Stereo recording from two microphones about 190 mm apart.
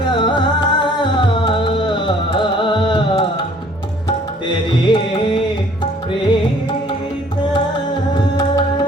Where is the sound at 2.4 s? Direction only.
25° left (ahead or behind).